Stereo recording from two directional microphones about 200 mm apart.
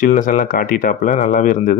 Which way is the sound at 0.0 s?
40° left (ahead or behind).